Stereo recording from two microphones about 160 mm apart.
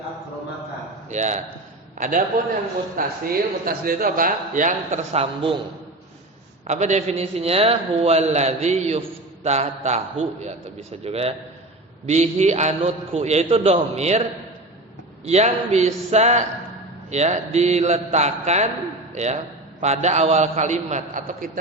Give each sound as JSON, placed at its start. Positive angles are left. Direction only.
{"t": 1.1, "sound": "a man's voice", "side_deg": -45}
{"t": 6.7, "sound": "a man's voice", "side_deg": -45}